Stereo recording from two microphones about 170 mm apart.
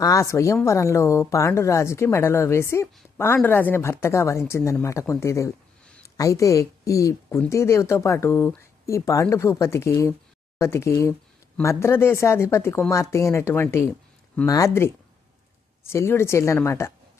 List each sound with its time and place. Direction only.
0.0 s speech: 20° left (ahead or behind)